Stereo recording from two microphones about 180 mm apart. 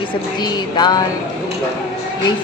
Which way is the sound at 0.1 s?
25° left (ahead or behind).